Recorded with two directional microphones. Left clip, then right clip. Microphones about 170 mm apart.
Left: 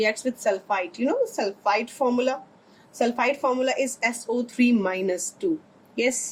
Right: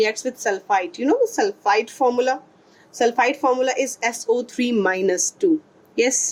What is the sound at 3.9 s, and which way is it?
Speech, 45° right (ahead or behind).